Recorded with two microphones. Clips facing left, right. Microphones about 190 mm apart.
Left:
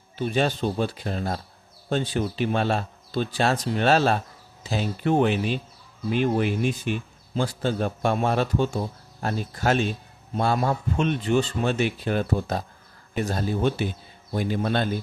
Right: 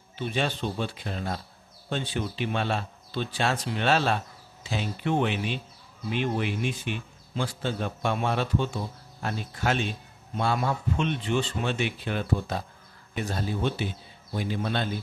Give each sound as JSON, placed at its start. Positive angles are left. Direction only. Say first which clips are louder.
{"t": 0.2, "sound": "speech", "louder": "left 5 dB", "side_deg": 40}